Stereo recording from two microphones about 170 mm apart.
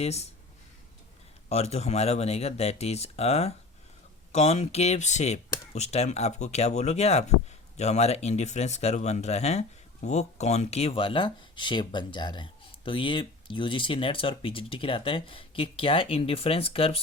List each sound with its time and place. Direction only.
0.0 s speech: 40° left (ahead or behind)
1.5 s speech: 40° left (ahead or behind)